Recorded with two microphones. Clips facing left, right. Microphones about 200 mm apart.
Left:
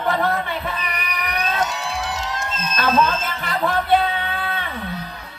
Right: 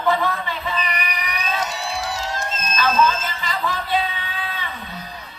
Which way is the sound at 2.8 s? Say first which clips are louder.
Even; 60° left (ahead or behind).